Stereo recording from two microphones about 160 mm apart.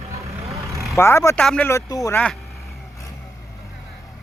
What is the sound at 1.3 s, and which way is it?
Speech, 5° left (ahead or behind).